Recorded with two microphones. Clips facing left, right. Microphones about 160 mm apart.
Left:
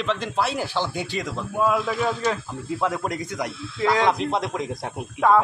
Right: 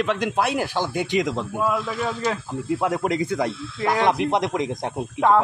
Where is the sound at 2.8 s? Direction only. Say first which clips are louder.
Right 2 dB; 15° right (ahead or behind).